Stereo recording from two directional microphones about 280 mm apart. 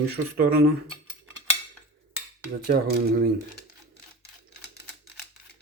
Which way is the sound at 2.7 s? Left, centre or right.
Right.